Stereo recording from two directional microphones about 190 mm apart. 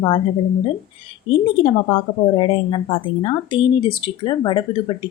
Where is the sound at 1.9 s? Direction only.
30° left (ahead or behind).